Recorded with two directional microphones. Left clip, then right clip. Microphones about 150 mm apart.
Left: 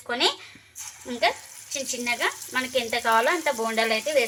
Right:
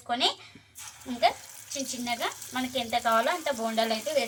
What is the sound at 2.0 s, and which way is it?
Frying, 50° left (ahead or behind).